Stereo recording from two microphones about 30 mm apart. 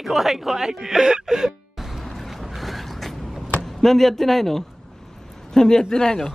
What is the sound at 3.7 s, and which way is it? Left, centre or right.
Speech, centre.